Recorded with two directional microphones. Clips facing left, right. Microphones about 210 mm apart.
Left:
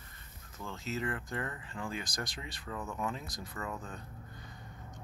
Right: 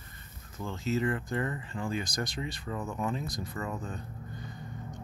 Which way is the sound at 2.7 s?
10° right (ahead or behind).